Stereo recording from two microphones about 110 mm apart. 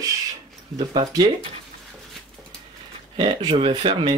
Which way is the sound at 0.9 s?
40° right (ahead or behind).